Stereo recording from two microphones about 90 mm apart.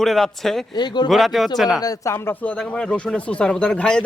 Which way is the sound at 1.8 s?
40° left (ahead or behind).